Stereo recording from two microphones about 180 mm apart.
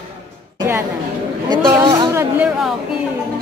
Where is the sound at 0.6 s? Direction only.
15° right (ahead or behind).